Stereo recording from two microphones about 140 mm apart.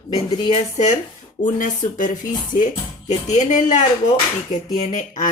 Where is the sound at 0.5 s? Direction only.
55° left (ahead or behind).